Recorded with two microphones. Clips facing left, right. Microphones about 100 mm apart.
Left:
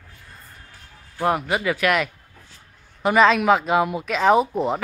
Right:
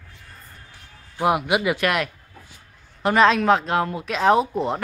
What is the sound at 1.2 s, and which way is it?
Speech, 10° right (ahead or behind).